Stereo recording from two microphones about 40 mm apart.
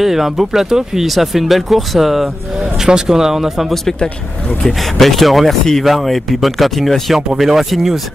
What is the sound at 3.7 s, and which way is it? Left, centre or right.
Speech, centre.